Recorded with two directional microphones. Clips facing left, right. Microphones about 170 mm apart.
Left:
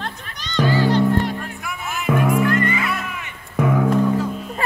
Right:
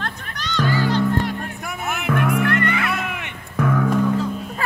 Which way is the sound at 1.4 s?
45° right (ahead or behind).